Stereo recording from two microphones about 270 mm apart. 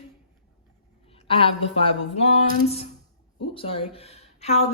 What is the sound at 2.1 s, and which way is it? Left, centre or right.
Speech, left.